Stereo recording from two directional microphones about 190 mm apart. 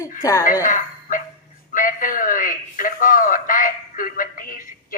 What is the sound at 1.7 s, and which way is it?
Radio, 45° left (ahead or behind).